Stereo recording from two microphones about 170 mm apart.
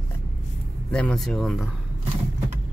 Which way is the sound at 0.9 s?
5° left (ahead or behind).